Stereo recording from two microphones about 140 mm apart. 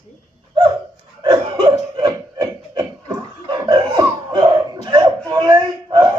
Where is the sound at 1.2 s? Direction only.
40° right (ahead or behind).